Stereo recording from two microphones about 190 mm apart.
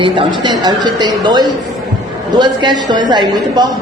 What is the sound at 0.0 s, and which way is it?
A woman's voice, 25° right (ahead or behind).